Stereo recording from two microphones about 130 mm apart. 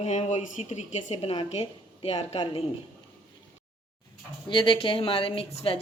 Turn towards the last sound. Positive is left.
turn(degrees=45)  # may be behind; listen again after turning